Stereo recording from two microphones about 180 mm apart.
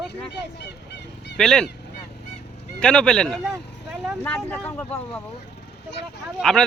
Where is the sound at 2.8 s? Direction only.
5° left (ahead or behind).